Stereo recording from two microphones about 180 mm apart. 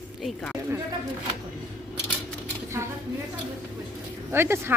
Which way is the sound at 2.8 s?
15° right (ahead or behind).